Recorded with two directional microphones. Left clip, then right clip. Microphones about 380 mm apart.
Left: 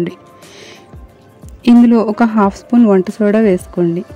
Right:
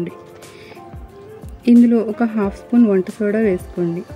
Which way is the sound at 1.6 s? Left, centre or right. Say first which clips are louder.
Left 4 dB; centre.